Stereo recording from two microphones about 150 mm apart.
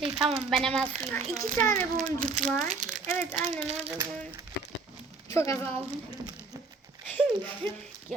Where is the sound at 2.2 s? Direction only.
65° right (ahead or behind).